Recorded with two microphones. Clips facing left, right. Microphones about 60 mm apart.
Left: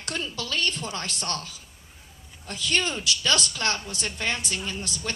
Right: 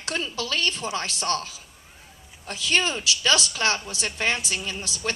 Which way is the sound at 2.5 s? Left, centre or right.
Centre.